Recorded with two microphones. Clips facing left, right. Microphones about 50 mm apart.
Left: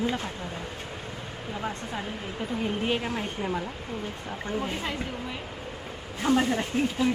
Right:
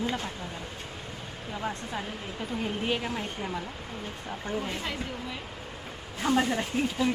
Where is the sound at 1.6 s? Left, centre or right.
Centre.